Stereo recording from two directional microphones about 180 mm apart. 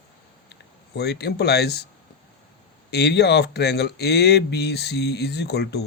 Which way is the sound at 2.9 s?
65° left (ahead or behind).